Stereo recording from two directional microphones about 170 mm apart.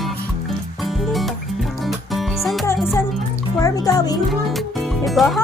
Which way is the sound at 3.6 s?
20° left (ahead or behind).